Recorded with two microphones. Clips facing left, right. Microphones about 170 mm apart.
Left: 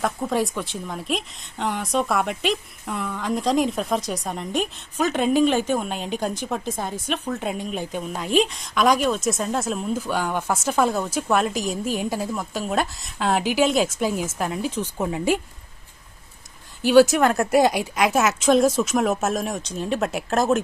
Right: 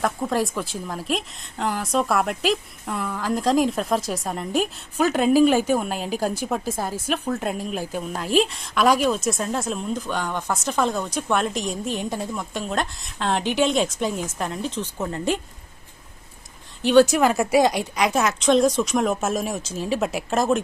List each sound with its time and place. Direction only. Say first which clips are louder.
0.0 s speech: even; centre (ahead or behind)
16.8 s speech: left 1 dB; 5° left (ahead or behind)